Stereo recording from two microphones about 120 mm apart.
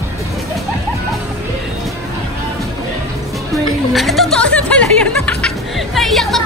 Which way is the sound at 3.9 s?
Centre (ahead or behind).